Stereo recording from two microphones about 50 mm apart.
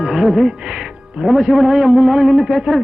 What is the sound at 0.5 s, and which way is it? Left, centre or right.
A man's voice, centre.